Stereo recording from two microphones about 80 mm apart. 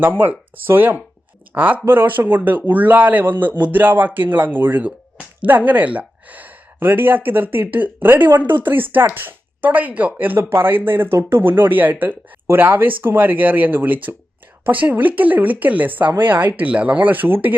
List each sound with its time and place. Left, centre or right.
0.0 s speech: right